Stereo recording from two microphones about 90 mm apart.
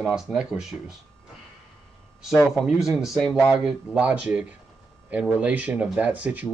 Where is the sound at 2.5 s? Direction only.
5° right (ahead or behind).